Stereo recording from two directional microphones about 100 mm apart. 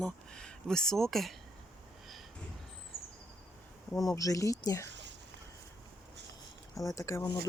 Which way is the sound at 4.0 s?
35° left (ahead or behind).